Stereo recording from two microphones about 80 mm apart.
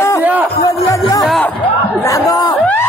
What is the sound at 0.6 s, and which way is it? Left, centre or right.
Music, left.